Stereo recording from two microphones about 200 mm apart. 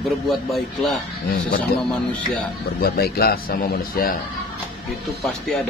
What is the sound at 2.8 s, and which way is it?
A man's voice, 50° left (ahead or behind).